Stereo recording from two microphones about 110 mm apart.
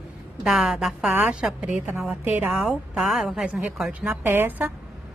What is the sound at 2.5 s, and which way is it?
A woman's voice, 5° right (ahead or behind).